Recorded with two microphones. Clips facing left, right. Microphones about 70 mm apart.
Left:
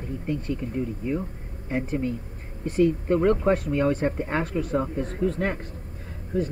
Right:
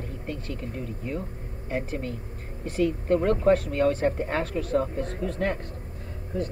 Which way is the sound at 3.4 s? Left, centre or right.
Centre.